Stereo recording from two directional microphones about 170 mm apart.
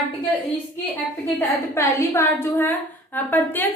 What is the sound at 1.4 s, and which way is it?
A woman's voice, 15° left (ahead or behind).